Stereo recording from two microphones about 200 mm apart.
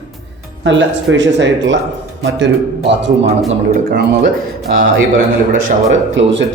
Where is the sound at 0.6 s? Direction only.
65° right (ahead or behind).